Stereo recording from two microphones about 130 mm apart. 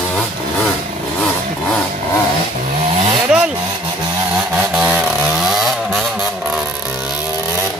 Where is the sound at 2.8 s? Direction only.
45° right (ahead or behind).